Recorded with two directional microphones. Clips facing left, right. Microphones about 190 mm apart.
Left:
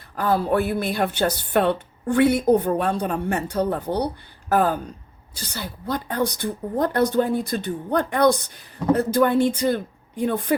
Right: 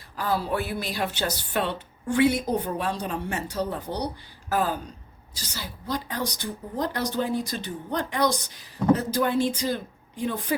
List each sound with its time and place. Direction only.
0.2 s a woman's voice: 55° left (ahead or behind)